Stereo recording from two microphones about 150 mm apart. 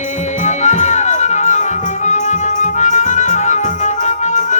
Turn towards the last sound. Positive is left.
turn(degrees=55)  # may be behind; listen again after turning